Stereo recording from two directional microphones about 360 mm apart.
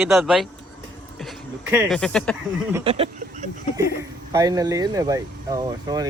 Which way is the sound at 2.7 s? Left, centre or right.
Centre.